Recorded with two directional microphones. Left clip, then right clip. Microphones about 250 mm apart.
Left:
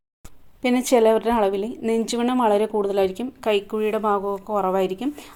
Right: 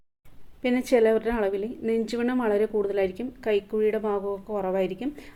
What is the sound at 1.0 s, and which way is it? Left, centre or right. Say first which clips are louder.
A woman's voice: left 5 dB; left.